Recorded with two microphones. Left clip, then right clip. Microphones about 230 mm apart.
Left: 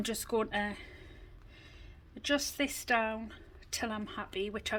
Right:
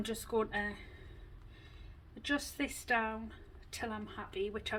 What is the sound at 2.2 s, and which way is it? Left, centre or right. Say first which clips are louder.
Speech: left 4 dB; left.